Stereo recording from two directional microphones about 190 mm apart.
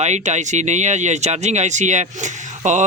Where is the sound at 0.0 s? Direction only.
40° right (ahead or behind).